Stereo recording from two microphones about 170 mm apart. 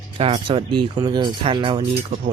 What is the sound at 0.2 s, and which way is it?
Speech, 30° right (ahead or behind).